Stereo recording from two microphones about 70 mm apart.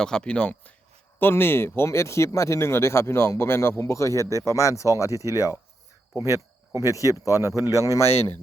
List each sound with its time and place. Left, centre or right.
0.0 s speech: centre
1.2 s speech: left
6.8 s speech: left